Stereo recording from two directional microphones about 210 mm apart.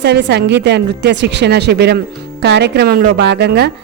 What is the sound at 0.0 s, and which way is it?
A woman's voice, 55° right (ahead or behind).